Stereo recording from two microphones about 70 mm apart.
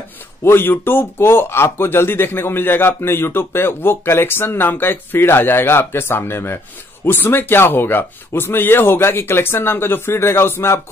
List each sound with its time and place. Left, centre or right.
0.4 s speech: left